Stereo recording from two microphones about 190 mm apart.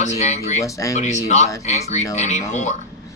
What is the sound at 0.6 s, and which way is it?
Speech, 15° left (ahead or behind).